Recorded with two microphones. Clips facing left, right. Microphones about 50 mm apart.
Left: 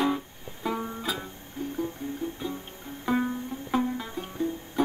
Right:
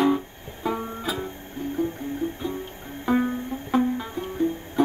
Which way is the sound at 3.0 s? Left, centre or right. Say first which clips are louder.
Right 4 dB; centre.